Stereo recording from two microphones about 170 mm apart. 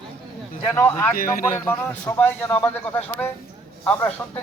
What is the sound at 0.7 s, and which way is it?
Speech, 10° left (ahead or behind).